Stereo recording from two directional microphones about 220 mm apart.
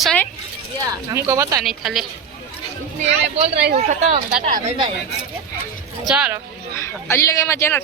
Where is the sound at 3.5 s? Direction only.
50° right (ahead or behind).